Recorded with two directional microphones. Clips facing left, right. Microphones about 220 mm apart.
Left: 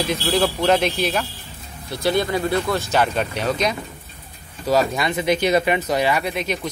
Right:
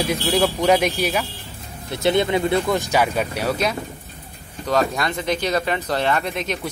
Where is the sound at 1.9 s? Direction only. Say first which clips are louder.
Right 2 dB; 20° right (ahead or behind).